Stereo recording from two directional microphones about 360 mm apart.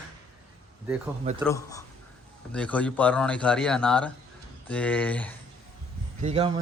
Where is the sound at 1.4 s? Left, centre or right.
Centre.